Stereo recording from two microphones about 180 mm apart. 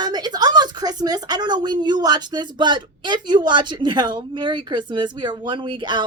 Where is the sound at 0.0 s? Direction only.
25° right (ahead or behind).